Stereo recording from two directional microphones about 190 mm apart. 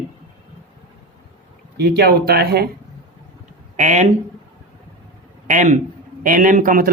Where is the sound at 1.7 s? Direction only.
60° right (ahead or behind).